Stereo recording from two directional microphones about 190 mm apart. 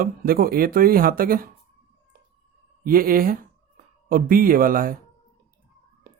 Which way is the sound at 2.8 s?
50° right (ahead or behind).